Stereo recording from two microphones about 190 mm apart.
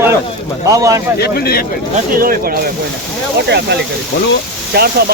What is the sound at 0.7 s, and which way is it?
Speech, 15° right (ahead or behind).